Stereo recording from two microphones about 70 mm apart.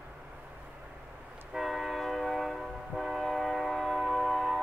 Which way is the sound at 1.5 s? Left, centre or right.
Centre.